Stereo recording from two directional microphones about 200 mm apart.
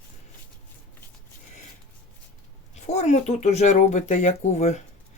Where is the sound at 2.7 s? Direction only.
35° left (ahead or behind).